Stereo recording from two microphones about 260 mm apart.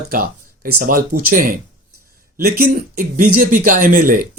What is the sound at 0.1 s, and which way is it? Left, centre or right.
Speech, right.